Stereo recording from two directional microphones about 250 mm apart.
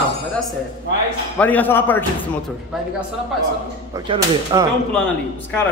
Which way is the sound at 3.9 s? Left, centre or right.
Centre.